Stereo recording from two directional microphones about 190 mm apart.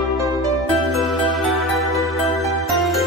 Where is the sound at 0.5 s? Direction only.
Centre (ahead or behind).